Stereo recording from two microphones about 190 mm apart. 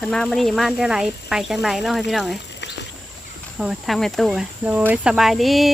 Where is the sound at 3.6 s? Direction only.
Centre (ahead or behind).